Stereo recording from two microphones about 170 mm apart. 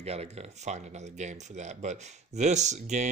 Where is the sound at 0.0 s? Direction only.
40° right (ahead or behind).